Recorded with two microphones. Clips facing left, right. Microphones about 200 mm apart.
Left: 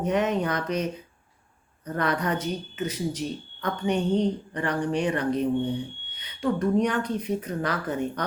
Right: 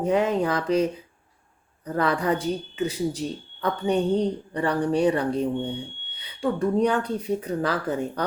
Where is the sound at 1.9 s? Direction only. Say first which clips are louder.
Right 3 dB; 30° right (ahead or behind).